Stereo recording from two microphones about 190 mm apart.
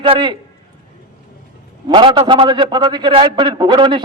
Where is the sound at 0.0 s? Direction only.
25° right (ahead or behind).